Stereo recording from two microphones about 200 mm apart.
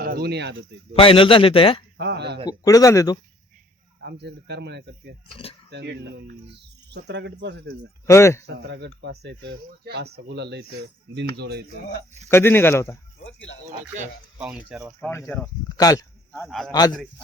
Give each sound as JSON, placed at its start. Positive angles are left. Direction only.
{"t": 0.0, "sound": "speech", "side_deg": -50}
{"t": 0.9, "sound": "a man's voice", "side_deg": 25}
{"t": 2.0, "sound": "speech", "side_deg": -60}
{"t": 2.5, "sound": "a man's voice", "side_deg": 15}
{"t": 4.0, "sound": "speech", "side_deg": -55}
{"t": 8.0, "sound": "a man's voice", "side_deg": 15}
{"t": 8.4, "sound": "speech", "side_deg": -60}
{"t": 12.3, "sound": "a man's voice", "side_deg": 10}
{"t": 13.2, "sound": "speech", "side_deg": 70}
{"t": 14.3, "sound": "speech", "side_deg": -5}
{"t": 15.7, "sound": "a man's voice", "side_deg": 20}
{"t": 16.3, "sound": "speech", "side_deg": 5}